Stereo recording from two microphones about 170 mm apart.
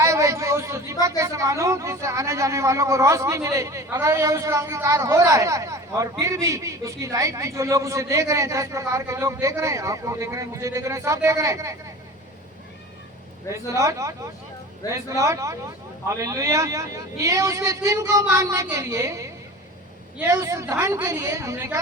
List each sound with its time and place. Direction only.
0.0 s a sound: 20° right (ahead or behind)
1.0 s a woman's voice: 15° right (ahead or behind)
13.5 s a woman's voice: 20° right (ahead or behind)
20.3 s a woman's voice: 20° right (ahead or behind)